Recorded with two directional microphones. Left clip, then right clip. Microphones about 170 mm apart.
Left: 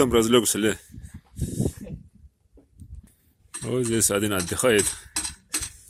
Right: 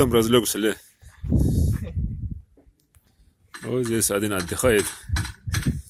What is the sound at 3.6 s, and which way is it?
Speech, centre (ahead or behind).